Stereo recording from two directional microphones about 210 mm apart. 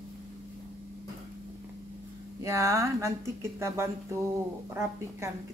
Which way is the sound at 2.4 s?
15° right (ahead or behind).